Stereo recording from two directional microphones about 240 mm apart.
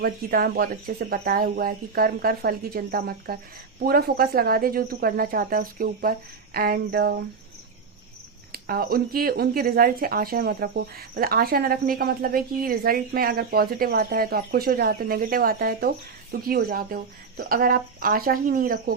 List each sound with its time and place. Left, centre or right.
0.0 s speech: right
8.5 s speech: right